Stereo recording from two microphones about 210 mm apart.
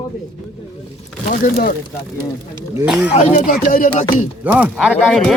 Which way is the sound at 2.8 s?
5° right (ahead or behind).